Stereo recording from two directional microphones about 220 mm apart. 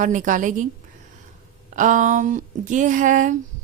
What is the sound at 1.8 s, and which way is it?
A woman's voice, 35° right (ahead or behind).